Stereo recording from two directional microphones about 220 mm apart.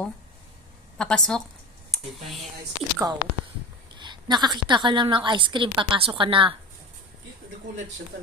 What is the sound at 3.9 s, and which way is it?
A woman's voice, 20° right (ahead or behind).